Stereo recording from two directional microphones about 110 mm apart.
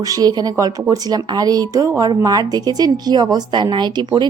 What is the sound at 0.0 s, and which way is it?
Speech, 35° right (ahead or behind).